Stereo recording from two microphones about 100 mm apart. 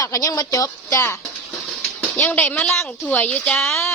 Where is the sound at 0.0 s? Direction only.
35° left (ahead or behind).